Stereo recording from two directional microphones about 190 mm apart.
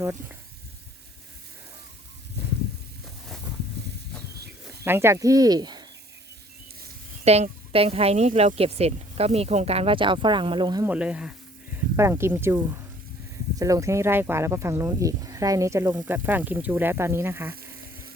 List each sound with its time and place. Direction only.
0.0 s speech: 15° right (ahead or behind)
4.4 s a sound: 55° right (ahead or behind)
4.9 s speech: 15° right (ahead or behind)
7.3 s speech: 35° right (ahead or behind)
10.8 s speech: 5° right (ahead or behind)